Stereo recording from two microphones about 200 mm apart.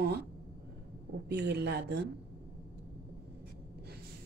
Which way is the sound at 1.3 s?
55° right (ahead or behind).